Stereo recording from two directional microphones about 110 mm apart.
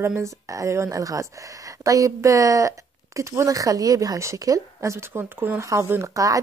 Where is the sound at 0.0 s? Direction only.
25° right (ahead or behind).